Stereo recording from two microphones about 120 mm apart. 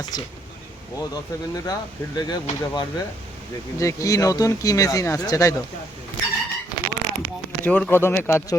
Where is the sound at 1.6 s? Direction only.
30° left (ahead or behind).